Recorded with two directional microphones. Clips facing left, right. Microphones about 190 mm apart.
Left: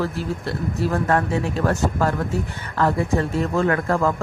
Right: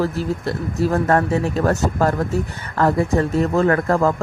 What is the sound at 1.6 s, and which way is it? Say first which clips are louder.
Speech: right 1 dB; 40° right (ahead or behind).